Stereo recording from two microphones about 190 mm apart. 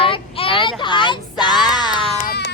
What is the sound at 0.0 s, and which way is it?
Child singing, 30° left (ahead or behind).